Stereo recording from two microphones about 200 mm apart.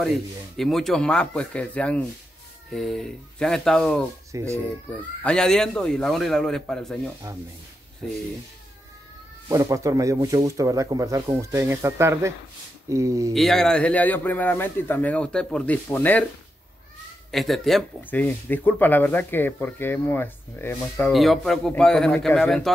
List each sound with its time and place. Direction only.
0.0 s speech: centre (ahead or behind)
4.3 s speech: 15° right (ahead or behind)
4.8 s speech: 5° left (ahead or behind)
8.0 s speech: 5° left (ahead or behind)
9.5 s speech: 15° right (ahead or behind)
13.3 s speech: centre (ahead or behind)
17.3 s speech: centre (ahead or behind)
21.1 s speech: centre (ahead or behind)